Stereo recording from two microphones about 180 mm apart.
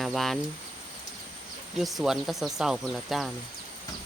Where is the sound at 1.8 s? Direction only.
Centre (ahead or behind).